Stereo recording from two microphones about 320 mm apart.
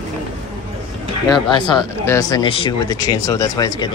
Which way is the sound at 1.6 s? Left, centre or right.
Centre.